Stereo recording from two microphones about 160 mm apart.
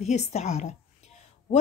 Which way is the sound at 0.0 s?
45° left (ahead or behind).